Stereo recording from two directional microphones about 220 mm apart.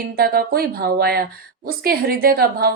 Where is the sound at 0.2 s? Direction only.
45° right (ahead or behind).